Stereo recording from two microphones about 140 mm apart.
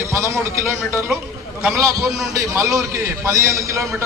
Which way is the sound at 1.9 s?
25° right (ahead or behind).